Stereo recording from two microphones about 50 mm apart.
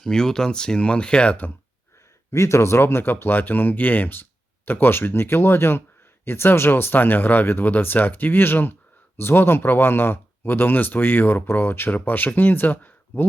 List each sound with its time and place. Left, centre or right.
0.0 s speech: centre
2.3 s speech: left
11.9 s speech: left